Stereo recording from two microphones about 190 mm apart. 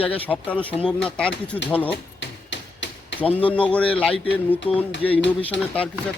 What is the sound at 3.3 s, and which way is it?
A man's voice, 5° left (ahead or behind).